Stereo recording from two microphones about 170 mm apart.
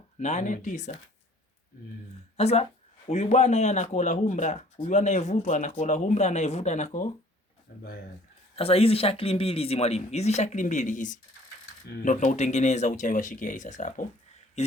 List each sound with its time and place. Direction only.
0.2 s speech: 45° left (ahead or behind)
2.3 s speech: 35° left (ahead or behind)
7.7 s speech: 55° left (ahead or behind)
8.5 s speech: 35° left (ahead or behind)